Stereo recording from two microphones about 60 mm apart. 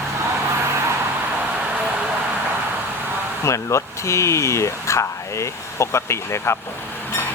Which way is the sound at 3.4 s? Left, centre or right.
Left.